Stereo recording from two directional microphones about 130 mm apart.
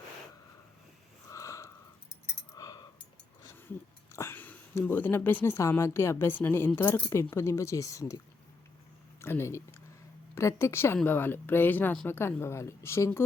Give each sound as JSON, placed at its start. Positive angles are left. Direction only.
{"t": 1.3, "sound": "a sound", "side_deg": 25}
{"t": 4.1, "sound": "speech", "side_deg": 20}
{"t": 9.2, "sound": "speech", "side_deg": 20}